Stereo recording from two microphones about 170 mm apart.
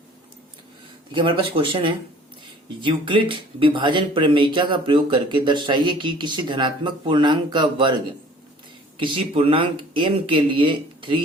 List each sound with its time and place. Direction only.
1.1 s speech: 30° right (ahead or behind)
9.0 s speech: 30° right (ahead or behind)